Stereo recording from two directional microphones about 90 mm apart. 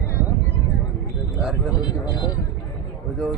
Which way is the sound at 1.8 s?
50° left (ahead or behind).